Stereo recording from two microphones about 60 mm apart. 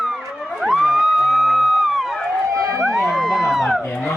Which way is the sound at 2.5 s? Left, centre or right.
Right.